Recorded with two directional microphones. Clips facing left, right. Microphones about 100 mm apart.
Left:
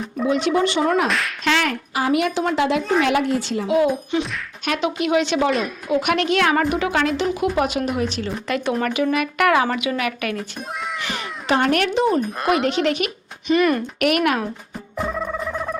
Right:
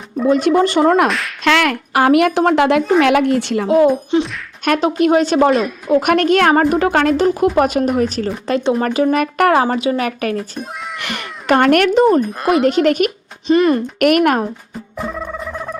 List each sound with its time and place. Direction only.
0.3 s speech: 45° right (ahead or behind)
1.0 s speech: centre (ahead or behind)
1.5 s a woman's voice: 80° right
4.6 s speech: 45° right (ahead or behind)
8.4 s a woman's voice: 30° right (ahead or behind)
11.0 s speech: 65° right (ahead or behind); by 12.2 s 45° right (ahead or behind)
12.4 s speech: centre (ahead or behind)
12.6 s speech: 45° right (ahead or behind)
13.5 s speech: 30° right (ahead or behind)
14.0 s speech: 45° right (ahead or behind)
14.9 s a sound: centre (ahead or behind)